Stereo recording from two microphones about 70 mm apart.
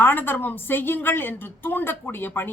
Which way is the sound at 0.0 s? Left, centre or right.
Left.